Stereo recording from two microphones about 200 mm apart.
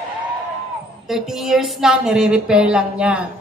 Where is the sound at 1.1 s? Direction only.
Centre (ahead or behind).